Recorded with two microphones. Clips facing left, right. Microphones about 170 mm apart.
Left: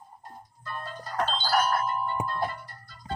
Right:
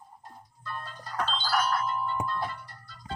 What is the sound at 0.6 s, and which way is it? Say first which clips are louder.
Music: left 2 dB; 50° left (ahead or behind).